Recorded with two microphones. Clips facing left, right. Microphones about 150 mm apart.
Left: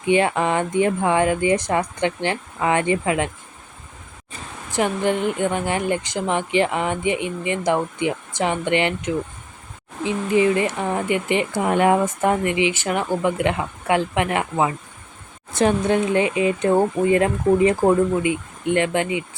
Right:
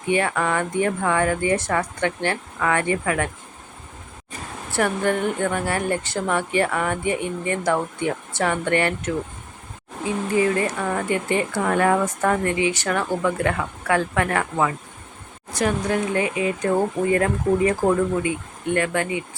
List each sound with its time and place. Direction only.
0.1 s speech: 20° left (ahead or behind)
4.7 s speech: 15° left (ahead or behind)